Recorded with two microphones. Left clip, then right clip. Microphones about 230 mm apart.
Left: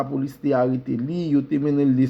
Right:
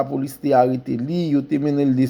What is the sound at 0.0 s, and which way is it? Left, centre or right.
Speech, right.